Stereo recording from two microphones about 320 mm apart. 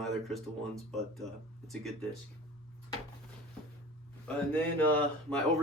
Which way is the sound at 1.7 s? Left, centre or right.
Centre.